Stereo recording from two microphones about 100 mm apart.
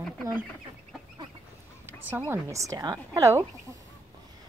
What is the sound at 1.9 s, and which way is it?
Speech, 20° right (ahead or behind).